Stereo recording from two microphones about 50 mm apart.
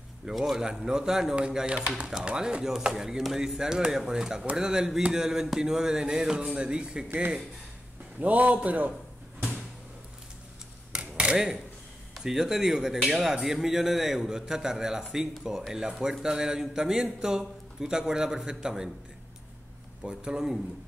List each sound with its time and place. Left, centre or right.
0.2 s speech: centre
8.2 s a man's voice: right
10.9 s a sound: right
11.3 s speech: centre
20.0 s speech: centre